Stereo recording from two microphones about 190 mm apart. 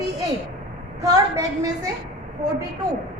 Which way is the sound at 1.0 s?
15° right (ahead or behind).